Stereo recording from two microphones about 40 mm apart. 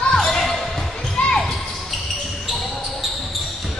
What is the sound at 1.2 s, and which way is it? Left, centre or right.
Basketball bounce, left.